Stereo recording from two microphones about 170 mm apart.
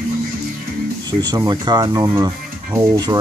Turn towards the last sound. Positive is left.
turn(degrees=-20)  # may be behind; listen again after turning